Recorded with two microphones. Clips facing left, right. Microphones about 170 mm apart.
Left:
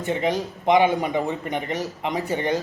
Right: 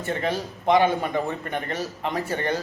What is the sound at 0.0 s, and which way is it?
Speech, 15° left (ahead or behind).